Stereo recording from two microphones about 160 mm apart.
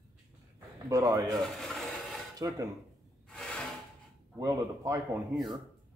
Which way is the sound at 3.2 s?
5° left (ahead or behind).